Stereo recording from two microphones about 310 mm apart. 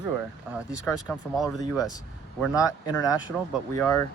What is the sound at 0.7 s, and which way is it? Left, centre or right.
Speech, centre.